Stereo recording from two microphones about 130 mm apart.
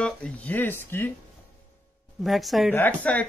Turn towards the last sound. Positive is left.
turn(degrees=15)  # may be behind; listen again after turning